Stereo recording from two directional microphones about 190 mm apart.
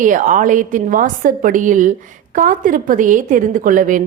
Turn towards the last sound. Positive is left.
turn(degrees=-45)  # may be behind; listen again after turning